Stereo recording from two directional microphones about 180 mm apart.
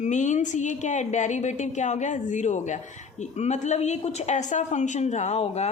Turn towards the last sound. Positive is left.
turn(degrees=35)  # may be behind; listen again after turning